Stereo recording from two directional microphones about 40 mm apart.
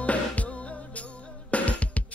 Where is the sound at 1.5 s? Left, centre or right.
Left.